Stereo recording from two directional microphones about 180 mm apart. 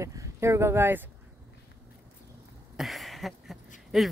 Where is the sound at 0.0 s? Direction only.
15° right (ahead or behind).